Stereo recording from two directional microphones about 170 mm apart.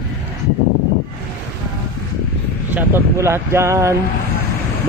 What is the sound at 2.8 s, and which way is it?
Speech, 15° right (ahead or behind).